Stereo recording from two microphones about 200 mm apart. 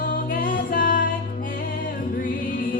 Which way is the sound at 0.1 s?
45° left (ahead or behind).